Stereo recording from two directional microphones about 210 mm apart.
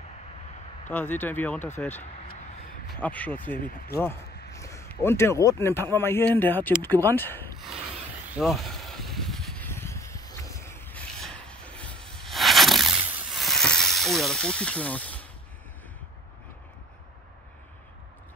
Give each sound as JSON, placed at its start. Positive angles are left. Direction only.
{"t": 0.8, "sound": "speech", "side_deg": 10}
{"t": 3.5, "sound": "speech", "side_deg": 40}
{"t": 3.9, "sound": "speech", "side_deg": 10}
{"t": 8.3, "sound": "a sound", "side_deg": 0}